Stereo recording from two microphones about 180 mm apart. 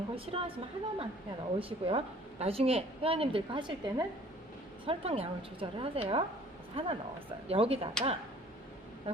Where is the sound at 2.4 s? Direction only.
35° right (ahead or behind).